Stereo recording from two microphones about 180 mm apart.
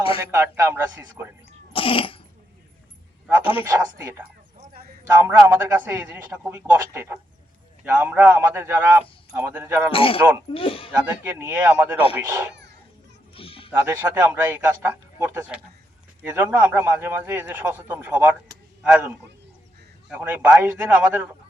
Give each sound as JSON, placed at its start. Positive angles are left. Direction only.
{"t": 0.3, "sound": "a man's voice", "side_deg": -15}
{"t": 1.7, "sound": "cough", "side_deg": 30}
{"t": 3.7, "sound": "a man's voice", "side_deg": -15}
{"t": 4.5, "sound": "a sound", "side_deg": -50}
{"t": 5.0, "sound": "a man's voice", "side_deg": -15}
{"t": 9.9, "sound": "speech", "side_deg": 30}
{"t": 10.9, "sound": "a man's voice", "side_deg": -10}
{"t": 13.3, "sound": "a sound", "side_deg": 30}
{"t": 13.8, "sound": "a man's voice", "side_deg": -10}